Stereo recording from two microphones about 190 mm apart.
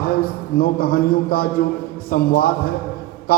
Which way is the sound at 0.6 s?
50° left (ahead or behind).